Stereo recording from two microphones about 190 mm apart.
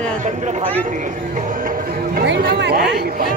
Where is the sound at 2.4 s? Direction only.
55° right (ahead or behind).